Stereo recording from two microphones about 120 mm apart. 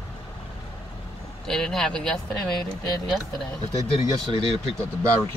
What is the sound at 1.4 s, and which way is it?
Speech, 5° left (ahead or behind).